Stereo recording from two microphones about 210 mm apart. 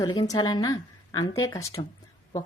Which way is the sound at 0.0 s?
20° left (ahead or behind).